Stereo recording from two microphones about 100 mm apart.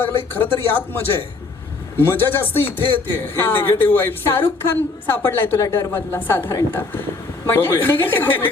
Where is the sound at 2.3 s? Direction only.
20° left (ahead or behind).